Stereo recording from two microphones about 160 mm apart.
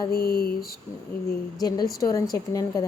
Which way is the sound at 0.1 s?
75° left (ahead or behind).